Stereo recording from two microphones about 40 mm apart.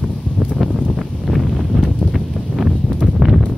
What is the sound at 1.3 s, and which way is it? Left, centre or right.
Wind noise, centre.